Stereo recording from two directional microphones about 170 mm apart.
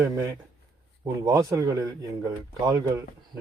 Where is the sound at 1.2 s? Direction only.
20° right (ahead or behind).